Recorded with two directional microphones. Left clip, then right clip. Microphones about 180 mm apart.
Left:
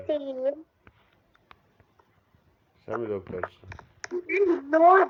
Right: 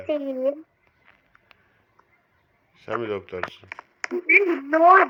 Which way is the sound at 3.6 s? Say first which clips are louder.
Right 8 dB; 35° right (ahead or behind).